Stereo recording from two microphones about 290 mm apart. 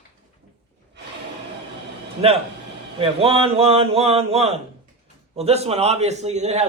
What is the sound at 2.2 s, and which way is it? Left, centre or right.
Speech, centre.